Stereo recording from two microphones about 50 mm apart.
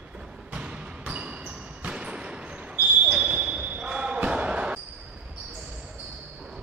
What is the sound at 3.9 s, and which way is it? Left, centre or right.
Basketball bounce, centre.